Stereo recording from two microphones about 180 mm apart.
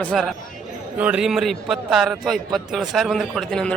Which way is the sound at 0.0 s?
Centre (ahead or behind).